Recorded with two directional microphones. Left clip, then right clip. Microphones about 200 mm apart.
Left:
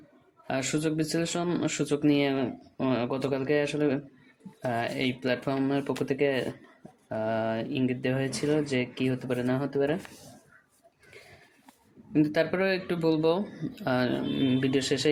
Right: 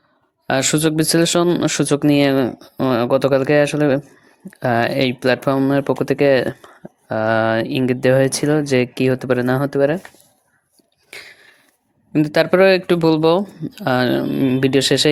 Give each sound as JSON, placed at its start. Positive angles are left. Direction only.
{"t": 0.4, "sound": "speech", "side_deg": -45}
{"t": 12.1, "sound": "speech", "side_deg": -40}